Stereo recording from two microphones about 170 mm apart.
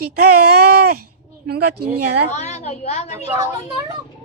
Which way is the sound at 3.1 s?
20° right (ahead or behind).